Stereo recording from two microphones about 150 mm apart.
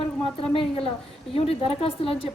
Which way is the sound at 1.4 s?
40° left (ahead or behind).